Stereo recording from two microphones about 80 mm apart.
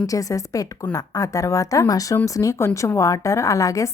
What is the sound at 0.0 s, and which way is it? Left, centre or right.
A woman's voice, left.